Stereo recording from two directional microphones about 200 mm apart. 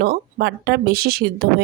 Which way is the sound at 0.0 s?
50° right (ahead or behind).